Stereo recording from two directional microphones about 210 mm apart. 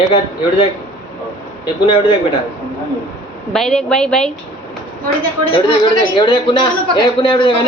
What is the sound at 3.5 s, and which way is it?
Speech, 5° left (ahead or behind).